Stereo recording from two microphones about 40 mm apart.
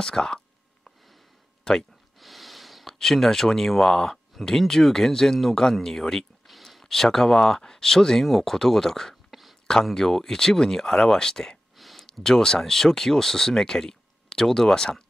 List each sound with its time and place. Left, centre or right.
0.0 s speech: centre
1.6 s speech: centre
2.1 s a sound: centre
3.0 s speech: centre
6.4 s speech: centre
9.3 s a sound: centre
9.9 s speech: centre
11.7 s a sound: centre
12.2 s speech: centre